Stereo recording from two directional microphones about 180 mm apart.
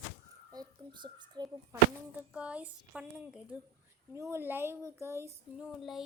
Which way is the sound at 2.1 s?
5° right (ahead or behind).